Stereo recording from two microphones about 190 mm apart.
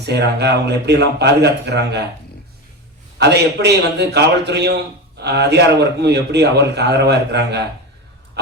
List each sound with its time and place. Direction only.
0.0 s a man's voice: 60° right (ahead or behind)
3.2 s a man's voice: 60° right (ahead or behind)